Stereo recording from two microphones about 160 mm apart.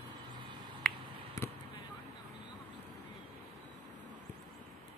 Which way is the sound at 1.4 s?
20° left (ahead or behind).